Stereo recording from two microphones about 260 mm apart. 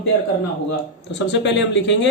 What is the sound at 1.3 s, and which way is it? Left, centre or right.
Speech, left.